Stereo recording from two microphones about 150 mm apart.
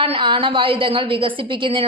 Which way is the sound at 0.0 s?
35° right (ahead or behind).